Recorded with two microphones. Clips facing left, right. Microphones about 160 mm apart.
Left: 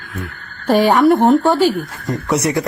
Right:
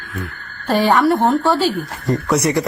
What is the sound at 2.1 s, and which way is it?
Speech, centre (ahead or behind).